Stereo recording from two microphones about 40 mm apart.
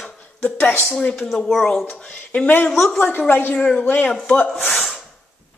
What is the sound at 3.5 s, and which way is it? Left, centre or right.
Speech, left.